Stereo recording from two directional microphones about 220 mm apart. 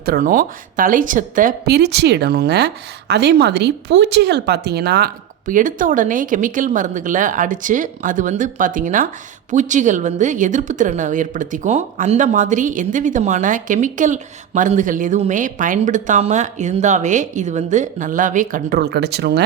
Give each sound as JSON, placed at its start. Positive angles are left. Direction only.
{"t": 0.0, "sound": "speech", "side_deg": -40}